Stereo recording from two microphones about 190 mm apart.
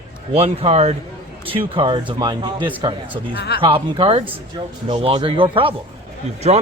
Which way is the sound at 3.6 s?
30° right (ahead or behind).